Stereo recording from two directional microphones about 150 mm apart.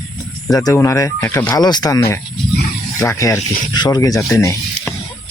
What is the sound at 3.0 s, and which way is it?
Speech, 20° left (ahead or behind).